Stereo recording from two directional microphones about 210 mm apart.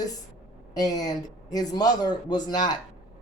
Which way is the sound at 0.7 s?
15° left (ahead or behind).